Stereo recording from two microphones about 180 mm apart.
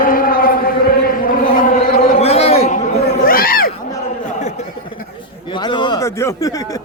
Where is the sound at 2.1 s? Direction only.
35° left (ahead or behind).